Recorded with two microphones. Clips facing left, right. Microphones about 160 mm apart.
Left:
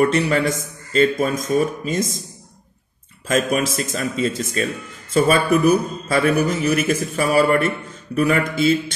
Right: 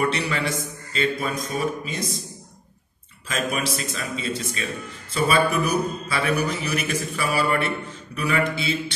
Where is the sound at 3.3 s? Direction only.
45° left (ahead or behind).